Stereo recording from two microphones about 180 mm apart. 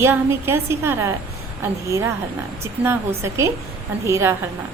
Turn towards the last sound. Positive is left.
turn(degrees=-15)  # may be behind; listen again after turning